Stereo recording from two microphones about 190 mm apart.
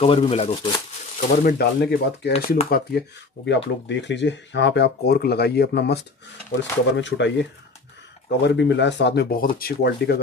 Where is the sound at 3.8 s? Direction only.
70° left (ahead or behind).